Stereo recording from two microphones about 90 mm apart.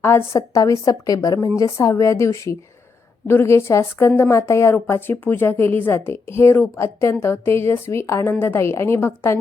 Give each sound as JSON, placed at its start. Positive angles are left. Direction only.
{"t": 0.0, "sound": "a woman's voice", "side_deg": 30}